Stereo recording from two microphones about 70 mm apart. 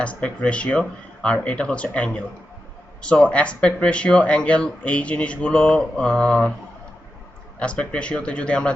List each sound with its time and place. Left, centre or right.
0.0 s speech: centre
7.6 s speech: centre